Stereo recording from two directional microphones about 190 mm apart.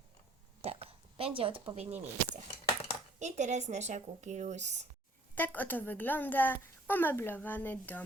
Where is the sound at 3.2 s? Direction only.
40° right (ahead or behind).